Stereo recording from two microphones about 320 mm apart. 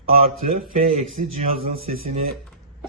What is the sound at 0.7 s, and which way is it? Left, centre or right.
A man's voice, right.